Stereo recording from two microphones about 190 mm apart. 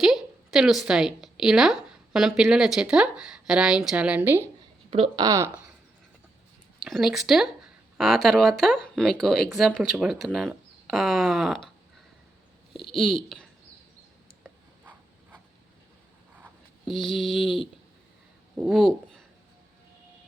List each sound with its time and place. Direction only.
0.0 s a woman's voice: centre (ahead or behind)
4.9 s speech: 25° right (ahead or behind)
6.8 s speech: centre (ahead or behind)
12.9 s speech: centre (ahead or behind)
16.8 s speech: centre (ahead or behind)